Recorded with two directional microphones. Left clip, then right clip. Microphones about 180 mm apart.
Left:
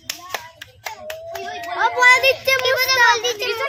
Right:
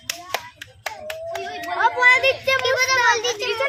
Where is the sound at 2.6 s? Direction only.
35° left (ahead or behind).